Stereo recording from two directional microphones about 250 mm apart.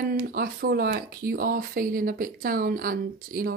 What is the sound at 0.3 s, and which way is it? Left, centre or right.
Speech, right.